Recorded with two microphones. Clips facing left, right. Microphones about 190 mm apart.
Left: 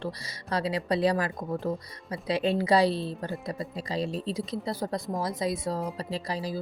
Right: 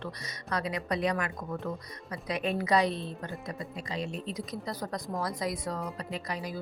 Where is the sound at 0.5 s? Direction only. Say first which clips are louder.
Left 4 dB; 30° left (ahead or behind).